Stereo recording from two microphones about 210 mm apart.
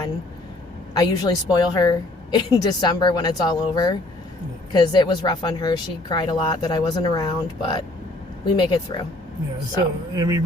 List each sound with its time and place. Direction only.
0.9 s speech: 20° left (ahead or behind)
10.2 s speech: 15° right (ahead or behind)